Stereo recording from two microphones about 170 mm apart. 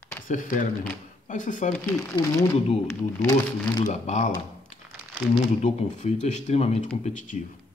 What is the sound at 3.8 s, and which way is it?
Speech, 45° left (ahead or behind).